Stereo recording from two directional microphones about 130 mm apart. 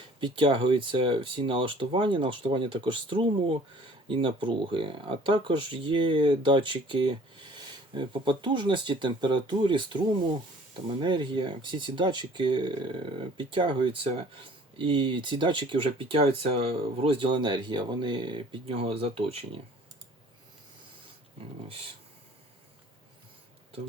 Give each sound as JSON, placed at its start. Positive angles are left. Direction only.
{"t": 0.2, "sound": "speech", "side_deg": -40}
{"t": 21.7, "sound": "speech", "side_deg": -45}